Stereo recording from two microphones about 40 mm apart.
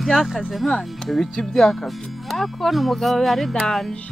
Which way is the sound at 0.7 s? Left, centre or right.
Centre.